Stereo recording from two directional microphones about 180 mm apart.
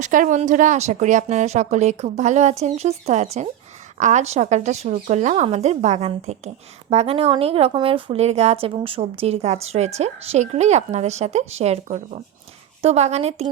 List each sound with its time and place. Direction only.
0.0 s speech: 45° right (ahead or behind)